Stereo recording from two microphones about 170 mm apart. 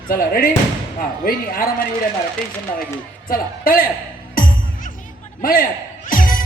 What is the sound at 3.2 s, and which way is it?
Speech, 55° left (ahead or behind).